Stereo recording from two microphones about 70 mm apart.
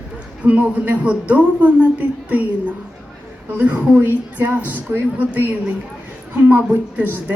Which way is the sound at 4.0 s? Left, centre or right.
Right.